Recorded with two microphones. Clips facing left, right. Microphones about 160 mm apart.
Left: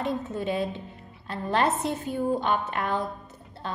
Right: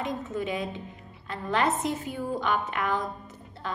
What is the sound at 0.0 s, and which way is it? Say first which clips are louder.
A woman's voice: left 2 dB; 35° left (ahead or behind).